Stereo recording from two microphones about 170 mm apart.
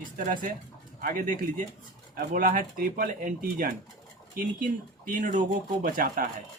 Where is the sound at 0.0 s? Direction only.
50° right (ahead or behind).